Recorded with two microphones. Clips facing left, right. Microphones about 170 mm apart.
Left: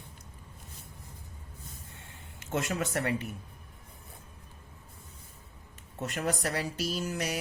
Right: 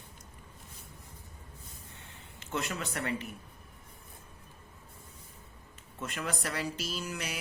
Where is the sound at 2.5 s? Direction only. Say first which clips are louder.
Left 4 dB; 45° left (ahead or behind).